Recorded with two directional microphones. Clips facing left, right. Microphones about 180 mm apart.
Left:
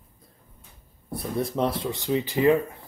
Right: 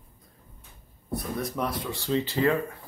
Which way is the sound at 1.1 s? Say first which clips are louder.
Left 4 dB; 30° left (ahead or behind).